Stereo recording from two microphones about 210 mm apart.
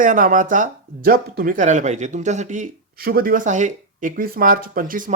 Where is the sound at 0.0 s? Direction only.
40° right (ahead or behind).